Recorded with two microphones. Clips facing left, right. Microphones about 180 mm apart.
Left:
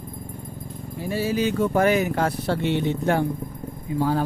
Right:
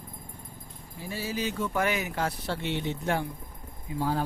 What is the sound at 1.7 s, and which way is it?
Speech, 45° left (ahead or behind).